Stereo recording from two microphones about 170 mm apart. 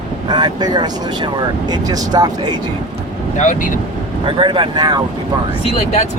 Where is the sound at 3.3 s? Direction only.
45° left (ahead or behind).